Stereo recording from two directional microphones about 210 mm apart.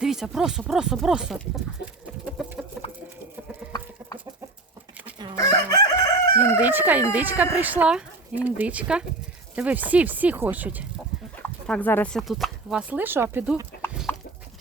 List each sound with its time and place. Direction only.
0.0 s speech: centre (ahead or behind)
2.2 s chicken: centre (ahead or behind)
5.4 s chicken: 15° left (ahead or behind)
6.6 s crowing: 10° right (ahead or behind)
7.1 s speech: 10° right (ahead or behind)
11.6 s speech: 5° left (ahead or behind)
13.8 s chicken: 10° left (ahead or behind)